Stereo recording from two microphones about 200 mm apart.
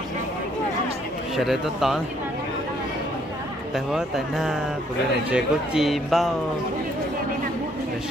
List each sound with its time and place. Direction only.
1.3 s speech: centre (ahead or behind)
3.7 s speech: centre (ahead or behind)